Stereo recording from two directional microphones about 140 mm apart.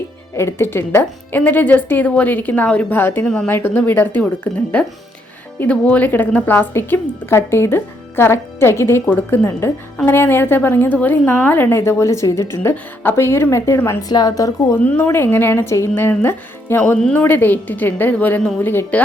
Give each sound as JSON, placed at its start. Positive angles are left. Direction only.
{"t": 0.3, "sound": "a woman's voice", "side_deg": 15}
{"t": 14.8, "sound": "a woman's voice", "side_deg": 10}